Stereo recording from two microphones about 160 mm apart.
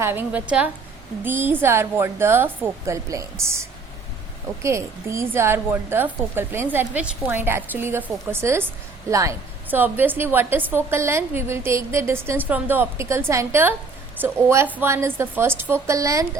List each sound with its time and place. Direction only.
0.0 s a woman's voice: 15° right (ahead or behind)
4.6 s a woman's voice: 15° right (ahead or behind)